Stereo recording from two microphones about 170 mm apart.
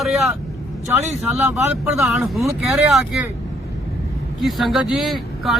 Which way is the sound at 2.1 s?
Centre (ahead or behind).